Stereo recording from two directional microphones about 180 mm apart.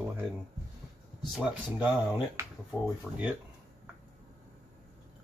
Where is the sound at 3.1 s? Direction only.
Centre (ahead or behind).